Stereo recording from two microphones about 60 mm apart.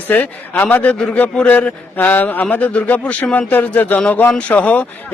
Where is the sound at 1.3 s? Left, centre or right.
Centre.